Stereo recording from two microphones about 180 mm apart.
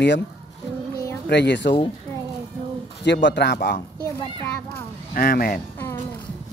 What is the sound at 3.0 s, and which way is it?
Speech, 75° left (ahead or behind).